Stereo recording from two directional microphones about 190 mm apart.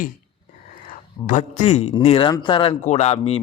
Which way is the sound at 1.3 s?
40° left (ahead or behind).